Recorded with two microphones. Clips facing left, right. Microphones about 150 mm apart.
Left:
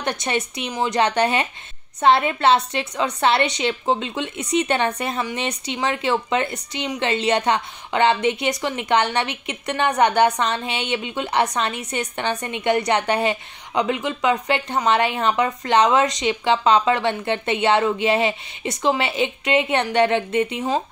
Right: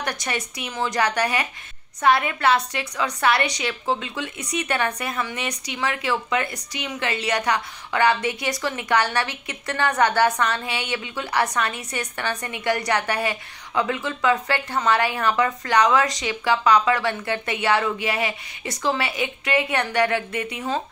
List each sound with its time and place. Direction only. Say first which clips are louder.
0.0 s a woman's voice: left 4 dB; 25° left (ahead or behind)